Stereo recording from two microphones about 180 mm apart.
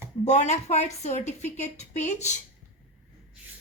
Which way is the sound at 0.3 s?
40° left (ahead or behind).